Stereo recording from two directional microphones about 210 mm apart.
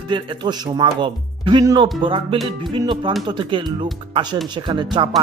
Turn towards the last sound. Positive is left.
turn(degrees=-20)  # may be behind; listen again after turning